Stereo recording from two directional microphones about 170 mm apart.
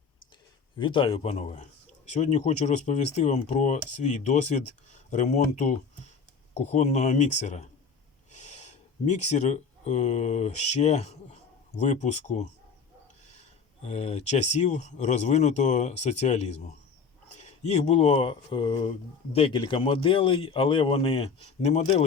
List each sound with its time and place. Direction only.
0.8 s speech: 30° left (ahead or behind)
13.8 s speech: 40° left (ahead or behind)